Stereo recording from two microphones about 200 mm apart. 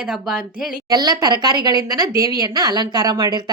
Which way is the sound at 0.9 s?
20° right (ahead or behind).